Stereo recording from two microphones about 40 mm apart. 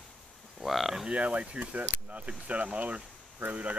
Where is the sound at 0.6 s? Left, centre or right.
Centre.